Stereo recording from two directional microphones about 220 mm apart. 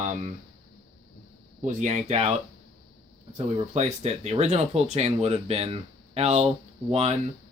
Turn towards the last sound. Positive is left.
turn(degrees=-30)  # may be behind; listen again after turning